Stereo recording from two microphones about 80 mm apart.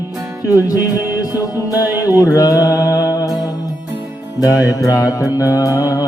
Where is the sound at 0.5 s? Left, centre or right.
Left.